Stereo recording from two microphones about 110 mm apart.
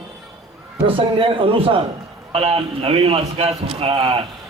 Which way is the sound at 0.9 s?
50° right (ahead or behind).